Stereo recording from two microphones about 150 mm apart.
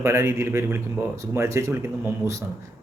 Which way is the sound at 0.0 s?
15° right (ahead or behind).